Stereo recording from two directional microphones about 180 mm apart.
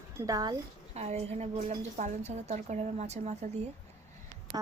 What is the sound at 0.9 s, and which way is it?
A woman's voice, 35° right (ahead or behind).